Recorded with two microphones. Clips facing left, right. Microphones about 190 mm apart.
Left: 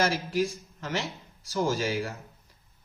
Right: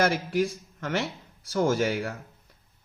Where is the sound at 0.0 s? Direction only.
60° right (ahead or behind).